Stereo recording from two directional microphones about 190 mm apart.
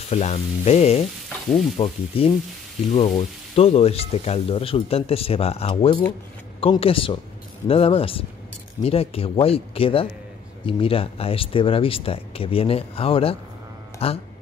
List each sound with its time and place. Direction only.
0.1 s speech: 35° left (ahead or behind)